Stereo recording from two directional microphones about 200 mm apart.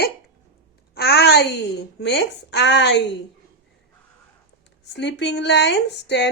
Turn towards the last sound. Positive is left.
turn(degrees=60)  # may be behind; listen again after turning